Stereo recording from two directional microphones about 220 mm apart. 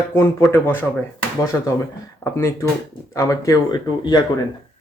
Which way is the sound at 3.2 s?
15° left (ahead or behind).